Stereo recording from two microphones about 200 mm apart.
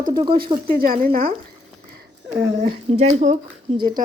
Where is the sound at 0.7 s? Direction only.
45° right (ahead or behind).